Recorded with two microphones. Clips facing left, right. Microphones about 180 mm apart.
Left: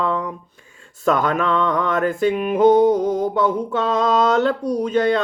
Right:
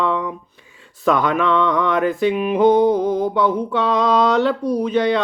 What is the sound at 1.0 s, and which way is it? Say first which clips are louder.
Music: right 1 dB; 45° left (ahead or behind).